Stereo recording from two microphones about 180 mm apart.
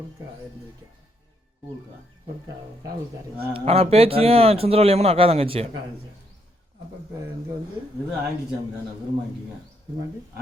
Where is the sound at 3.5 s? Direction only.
35° right (ahead or behind).